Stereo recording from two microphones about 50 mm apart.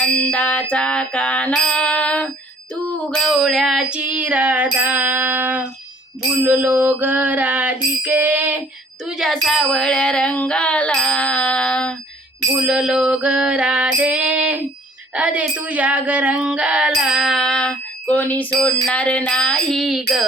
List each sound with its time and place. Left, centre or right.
0.0 s bicycle bell: left
1.6 s music: centre
3.4 s music: centre; by 5.6 s right
6.4 s bicycle bell: right
9.0 s bicycle bell: centre
9.3 s a sound: centre
9.6 s bicycle bell: left
11.2 s a sound: left
12.6 s music: centre
17.0 s music: centre
17.3 s music: centre
18.0 s bicycle bell: left
18.9 s bicycle bell: left